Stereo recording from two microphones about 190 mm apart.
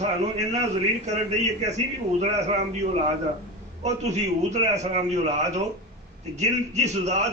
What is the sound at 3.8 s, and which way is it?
A man's voice, 35° right (ahead or behind).